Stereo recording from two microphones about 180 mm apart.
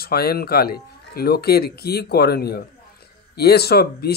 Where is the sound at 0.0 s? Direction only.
60° left (ahead or behind).